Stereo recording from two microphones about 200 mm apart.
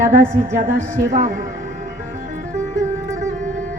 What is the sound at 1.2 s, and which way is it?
Speech, 40° right (ahead or behind).